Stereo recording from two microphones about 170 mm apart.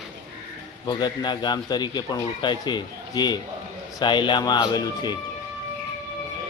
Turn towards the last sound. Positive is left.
turn(degrees=25)  # may be behind; listen again after turning